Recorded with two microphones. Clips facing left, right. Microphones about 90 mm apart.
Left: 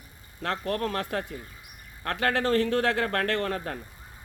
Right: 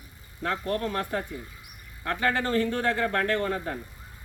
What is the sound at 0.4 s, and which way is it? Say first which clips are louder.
Speech: even; 80° left.